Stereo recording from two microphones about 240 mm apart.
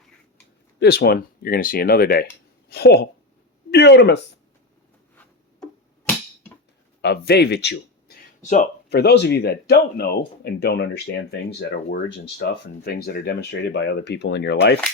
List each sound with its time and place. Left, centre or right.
0.8 s speech: left
7.0 s speech: left